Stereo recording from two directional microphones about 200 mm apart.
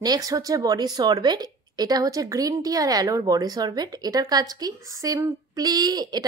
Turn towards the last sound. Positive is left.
turn(degrees=-20)  # may be behind; listen again after turning